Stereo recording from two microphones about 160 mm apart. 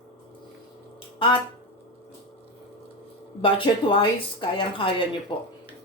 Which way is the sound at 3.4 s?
30° left (ahead or behind).